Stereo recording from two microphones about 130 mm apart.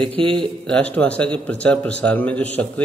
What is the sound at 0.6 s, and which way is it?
A man's voice, 10° left (ahead or behind).